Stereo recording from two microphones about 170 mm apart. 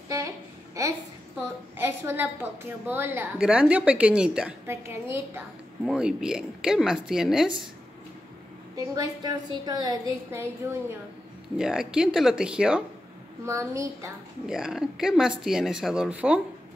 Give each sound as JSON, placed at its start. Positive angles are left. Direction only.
{"t": 0.8, "sound": "a sound", "side_deg": -20}
{"t": 1.8, "sound": "a woman's voice", "side_deg": -15}
{"t": 8.7, "sound": "a woman's voice", "side_deg": -20}
{"t": 11.5, "sound": "speech", "side_deg": -5}
{"t": 13.5, "sound": "a woman's voice", "side_deg": -20}
{"t": 14.4, "sound": "speech", "side_deg": -5}